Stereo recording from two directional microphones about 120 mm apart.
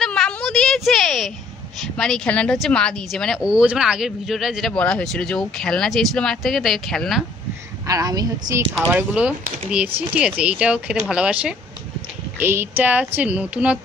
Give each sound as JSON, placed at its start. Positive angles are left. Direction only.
{"t": 0.0, "sound": "a sound", "side_deg": 5}
{"t": 2.0, "sound": "speech", "side_deg": 5}
{"t": 7.8, "sound": "a woman's voice", "side_deg": -30}
{"t": 8.9, "sound": "a woman's voice", "side_deg": -10}
{"t": 12.4, "sound": "a woman's voice", "side_deg": -20}